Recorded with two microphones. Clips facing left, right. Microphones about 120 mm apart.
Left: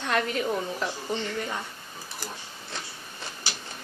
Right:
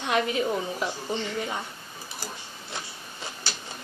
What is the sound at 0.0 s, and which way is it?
A woman's voice, 15° right (ahead or behind).